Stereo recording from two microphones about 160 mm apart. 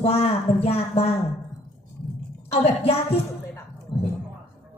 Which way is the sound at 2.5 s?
40° left (ahead or behind).